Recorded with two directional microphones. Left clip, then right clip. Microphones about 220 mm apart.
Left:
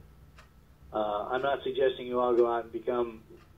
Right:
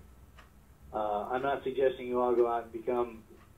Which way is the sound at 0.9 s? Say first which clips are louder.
Left 2 dB; 40° left (ahead or behind).